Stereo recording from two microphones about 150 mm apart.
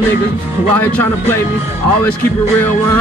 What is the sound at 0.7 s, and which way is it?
Speech, 15° left (ahead or behind).